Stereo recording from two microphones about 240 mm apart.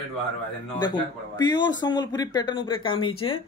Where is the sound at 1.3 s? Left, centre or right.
Centre.